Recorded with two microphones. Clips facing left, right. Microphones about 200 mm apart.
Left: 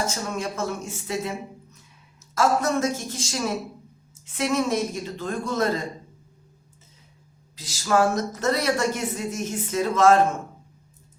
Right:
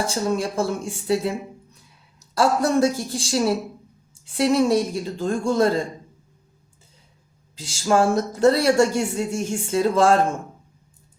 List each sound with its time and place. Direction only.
0.0 s speech: 30° right (ahead or behind)
7.5 s speech: 30° right (ahead or behind)